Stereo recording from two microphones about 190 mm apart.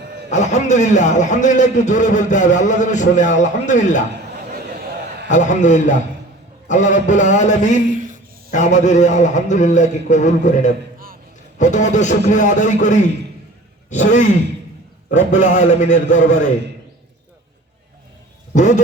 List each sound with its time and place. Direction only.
0.3 s a man's voice: 40° left (ahead or behind)
5.3 s a man's voice: 40° left (ahead or behind)
7.9 s a sound: 40° right (ahead or behind)
8.4 s a man's voice: 40° left (ahead or behind)
15.3 s a man's voice: 40° left (ahead or behind)
18.5 s a man's voice: 40° left (ahead or behind)